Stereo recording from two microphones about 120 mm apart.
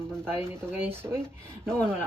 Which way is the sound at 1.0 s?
35° right (ahead or behind).